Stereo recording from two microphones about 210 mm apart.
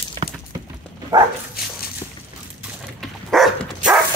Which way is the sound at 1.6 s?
45° left (ahead or behind).